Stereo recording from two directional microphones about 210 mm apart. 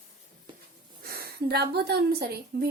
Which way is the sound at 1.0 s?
45° right (ahead or behind).